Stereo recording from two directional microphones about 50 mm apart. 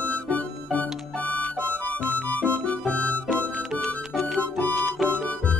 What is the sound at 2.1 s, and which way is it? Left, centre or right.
Music, left.